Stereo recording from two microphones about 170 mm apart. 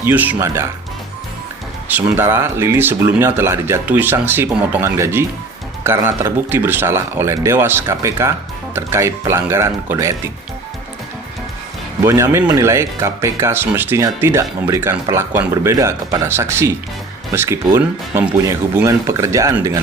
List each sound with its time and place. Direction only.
0.0 s speech: 10° right (ahead or behind)
1.9 s speech: 10° right (ahead or behind)
12.0 s speech: 15° right (ahead or behind)